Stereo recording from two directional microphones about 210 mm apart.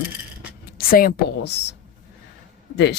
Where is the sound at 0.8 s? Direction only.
45° left (ahead or behind).